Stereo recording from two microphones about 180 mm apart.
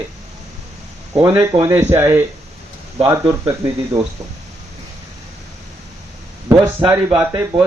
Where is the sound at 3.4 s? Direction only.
20° right (ahead or behind).